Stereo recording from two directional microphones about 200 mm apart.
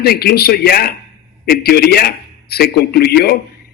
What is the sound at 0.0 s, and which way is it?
A man's voice, 50° left (ahead or behind).